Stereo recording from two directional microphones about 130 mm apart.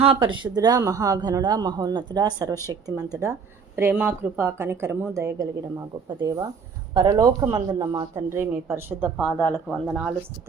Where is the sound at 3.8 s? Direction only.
15° right (ahead or behind); by 8.2 s 30° right (ahead or behind).